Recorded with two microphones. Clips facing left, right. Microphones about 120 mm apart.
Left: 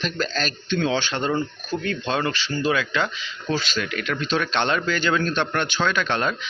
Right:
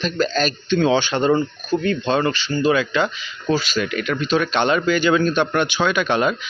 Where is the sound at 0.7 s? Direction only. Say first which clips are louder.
Right 5 dB; 20° right (ahead or behind).